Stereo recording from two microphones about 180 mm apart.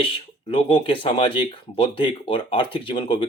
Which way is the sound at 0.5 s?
25° left (ahead or behind).